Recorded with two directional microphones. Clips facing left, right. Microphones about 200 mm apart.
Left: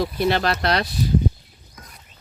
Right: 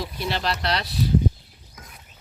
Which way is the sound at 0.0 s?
55° left (ahead or behind).